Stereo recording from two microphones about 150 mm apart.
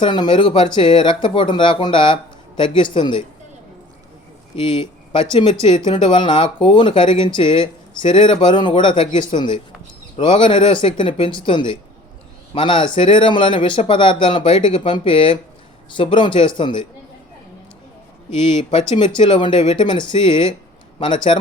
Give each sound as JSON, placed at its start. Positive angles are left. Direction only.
{"t": 0.0, "sound": "speech", "side_deg": 30}
{"t": 4.5, "sound": "speech", "side_deg": 35}
{"t": 18.4, "sound": "speech", "side_deg": 35}